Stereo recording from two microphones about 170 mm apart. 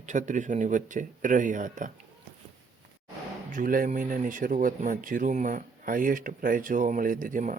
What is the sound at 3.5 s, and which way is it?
Speech, 50° right (ahead or behind).